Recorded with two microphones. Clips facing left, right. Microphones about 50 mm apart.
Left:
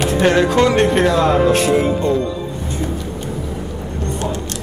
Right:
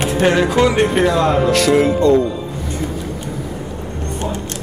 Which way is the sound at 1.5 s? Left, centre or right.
Right.